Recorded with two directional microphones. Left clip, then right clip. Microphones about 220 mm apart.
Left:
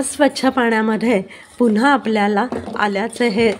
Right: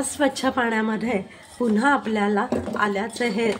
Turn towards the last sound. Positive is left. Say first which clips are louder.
# left 7 dB
turn(degrees=40)  # may be behind; listen again after turning